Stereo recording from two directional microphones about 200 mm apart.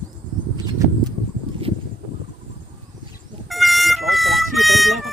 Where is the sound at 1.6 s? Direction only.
30° right (ahead or behind).